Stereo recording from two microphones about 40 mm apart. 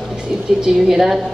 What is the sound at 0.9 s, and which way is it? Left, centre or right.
Speech, centre.